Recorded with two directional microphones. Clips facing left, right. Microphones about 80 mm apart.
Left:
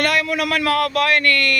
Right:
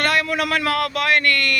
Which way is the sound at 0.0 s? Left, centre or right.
Right.